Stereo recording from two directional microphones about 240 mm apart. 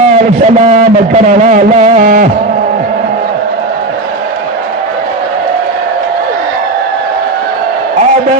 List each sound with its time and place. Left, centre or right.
0.4 s a man's voice: right